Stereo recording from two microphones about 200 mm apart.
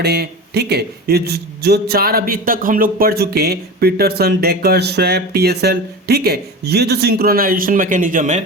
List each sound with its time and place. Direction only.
0.0 s a man's voice: 55° right (ahead or behind)